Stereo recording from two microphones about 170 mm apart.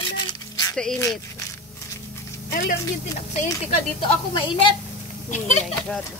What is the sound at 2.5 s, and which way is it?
Speech, 60° left (ahead or behind).